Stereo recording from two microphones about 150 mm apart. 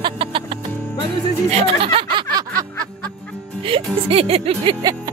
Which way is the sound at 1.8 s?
35° right (ahead or behind).